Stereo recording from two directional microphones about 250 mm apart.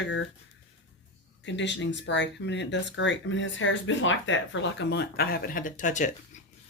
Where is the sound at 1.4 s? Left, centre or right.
Left.